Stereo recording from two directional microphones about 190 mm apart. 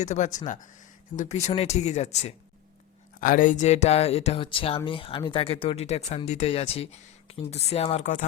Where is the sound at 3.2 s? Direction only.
45° left (ahead or behind).